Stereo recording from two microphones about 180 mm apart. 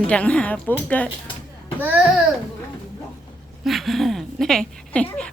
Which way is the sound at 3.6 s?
Centre (ahead or behind).